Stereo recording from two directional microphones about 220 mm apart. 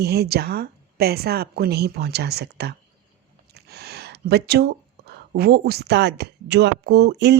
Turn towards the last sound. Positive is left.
turn(degrees=-50)  # may be behind; listen again after turning